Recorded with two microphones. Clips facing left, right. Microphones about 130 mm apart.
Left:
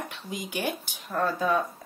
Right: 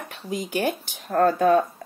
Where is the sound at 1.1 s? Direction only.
60° right (ahead or behind).